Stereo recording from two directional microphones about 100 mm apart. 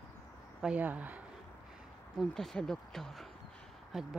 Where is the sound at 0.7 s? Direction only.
15° right (ahead or behind).